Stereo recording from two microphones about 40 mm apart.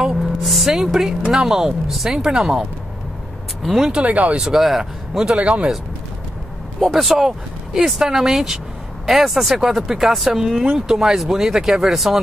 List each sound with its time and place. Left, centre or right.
0.0 s vehicle: centre
0.4 s speech: centre
3.6 s speech: centre
4.0 s speech: right
4.4 s speech: centre
5.3 s speech: right
6.8 s speech: centre